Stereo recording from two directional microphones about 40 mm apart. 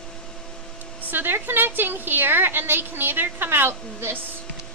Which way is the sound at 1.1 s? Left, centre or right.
Right.